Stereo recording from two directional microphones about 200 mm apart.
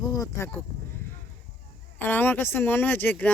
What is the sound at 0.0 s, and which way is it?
Speech, 15° left (ahead or behind).